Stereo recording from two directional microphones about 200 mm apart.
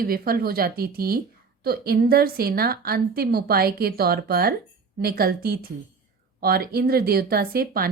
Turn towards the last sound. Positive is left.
turn(degrees=-50)  # may be behind; listen again after turning